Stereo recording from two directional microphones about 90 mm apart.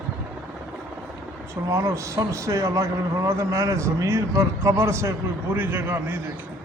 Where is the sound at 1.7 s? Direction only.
35° right (ahead or behind).